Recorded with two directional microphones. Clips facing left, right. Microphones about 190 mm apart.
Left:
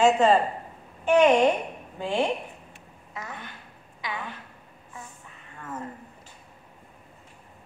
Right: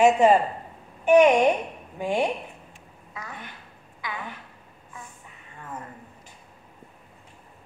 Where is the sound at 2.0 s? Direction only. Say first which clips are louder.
Right 1 dB; 15° right (ahead or behind).